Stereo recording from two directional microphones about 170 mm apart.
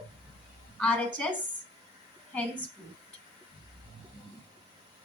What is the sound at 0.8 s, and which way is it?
Speech, 5° left (ahead or behind).